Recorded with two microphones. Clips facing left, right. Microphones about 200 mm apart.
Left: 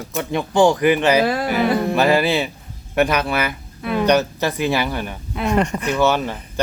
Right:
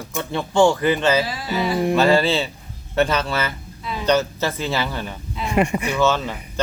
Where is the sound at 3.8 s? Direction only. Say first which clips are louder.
Left 9 dB; 60° left (ahead or behind).